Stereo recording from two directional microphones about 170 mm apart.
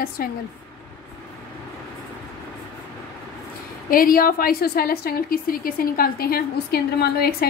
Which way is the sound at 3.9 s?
55° left (ahead or behind).